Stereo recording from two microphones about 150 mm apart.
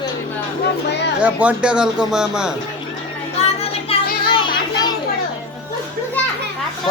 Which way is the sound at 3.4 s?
45° left (ahead or behind).